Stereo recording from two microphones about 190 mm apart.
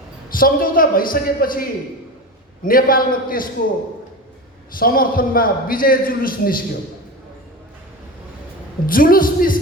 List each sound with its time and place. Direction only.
0.3 s a man's voice: 50° left (ahead or behind)
2.6 s a man's voice: 50° left (ahead or behind)
4.7 s a man's voice: 50° left (ahead or behind)
8.9 s a man's voice: 50° left (ahead or behind)